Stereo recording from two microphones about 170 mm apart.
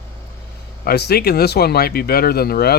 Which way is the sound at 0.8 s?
70° left (ahead or behind).